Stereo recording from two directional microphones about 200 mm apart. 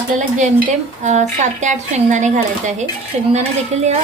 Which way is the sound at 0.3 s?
35° right (ahead or behind).